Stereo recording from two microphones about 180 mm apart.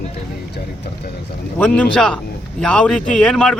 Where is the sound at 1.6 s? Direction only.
10° left (ahead or behind).